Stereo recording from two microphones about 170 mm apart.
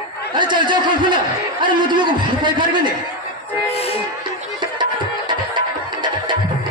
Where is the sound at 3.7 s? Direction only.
35° left (ahead or behind).